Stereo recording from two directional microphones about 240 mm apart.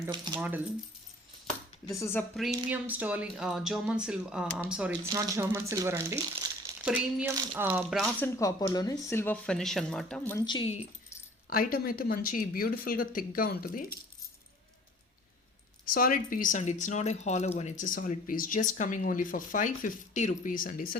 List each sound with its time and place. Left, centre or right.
0.0 s speech: centre
1.9 s speech: centre
2.5 s speech: centre
8.4 s speech: centre
11.4 s speech: left
15.9 s speech: left